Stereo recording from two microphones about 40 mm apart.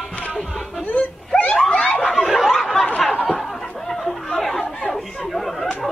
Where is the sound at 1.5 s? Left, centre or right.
Centre.